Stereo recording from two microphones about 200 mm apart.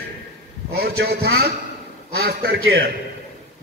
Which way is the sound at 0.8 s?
50° right (ahead or behind).